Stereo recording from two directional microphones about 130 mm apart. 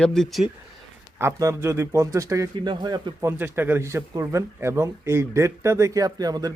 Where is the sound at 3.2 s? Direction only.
15° right (ahead or behind).